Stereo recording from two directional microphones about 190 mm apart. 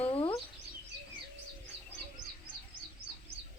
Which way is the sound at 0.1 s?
30° left (ahead or behind).